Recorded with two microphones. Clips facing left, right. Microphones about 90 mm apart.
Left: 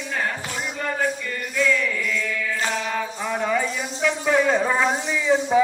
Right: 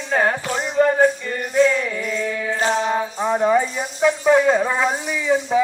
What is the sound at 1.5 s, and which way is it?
Chant, 35° right (ahead or behind).